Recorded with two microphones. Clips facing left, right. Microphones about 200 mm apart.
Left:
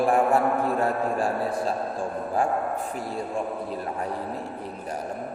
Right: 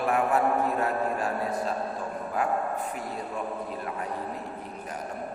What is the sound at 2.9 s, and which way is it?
Speech, 35° left (ahead or behind).